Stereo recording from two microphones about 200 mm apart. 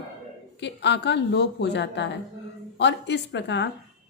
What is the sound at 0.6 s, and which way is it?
A woman's voice, 60° left (ahead or behind).